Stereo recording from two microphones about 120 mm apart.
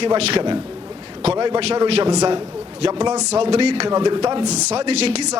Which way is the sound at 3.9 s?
35° right (ahead or behind).